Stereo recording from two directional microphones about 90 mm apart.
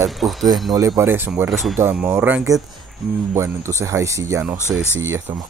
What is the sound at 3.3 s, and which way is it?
Speech, 30° right (ahead or behind).